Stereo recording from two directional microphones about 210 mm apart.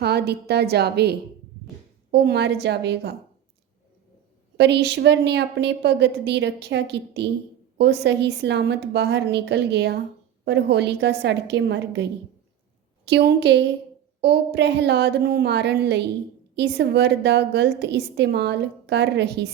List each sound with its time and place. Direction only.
0.0 s a woman's voice: 50° right (ahead or behind)
4.5 s a woman's voice: 55° right (ahead or behind)
13.1 s a woman's voice: 55° right (ahead or behind)